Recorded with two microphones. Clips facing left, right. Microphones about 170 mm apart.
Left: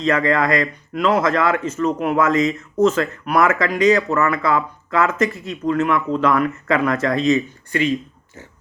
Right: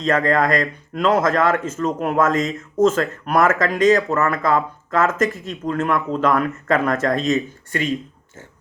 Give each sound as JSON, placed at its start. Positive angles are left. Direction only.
{"t": 0.0, "sound": "speech", "side_deg": -45}